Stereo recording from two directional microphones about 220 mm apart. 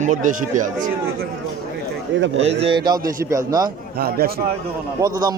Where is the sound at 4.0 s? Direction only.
45° right (ahead or behind).